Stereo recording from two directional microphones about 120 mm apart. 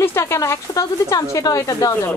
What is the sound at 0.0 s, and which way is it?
A woman's voice, 25° left (ahead or behind).